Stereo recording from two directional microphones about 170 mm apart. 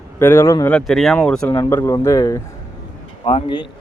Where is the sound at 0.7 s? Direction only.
Centre (ahead or behind).